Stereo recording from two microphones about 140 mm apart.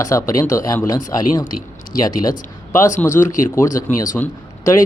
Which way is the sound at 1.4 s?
75° left (ahead or behind).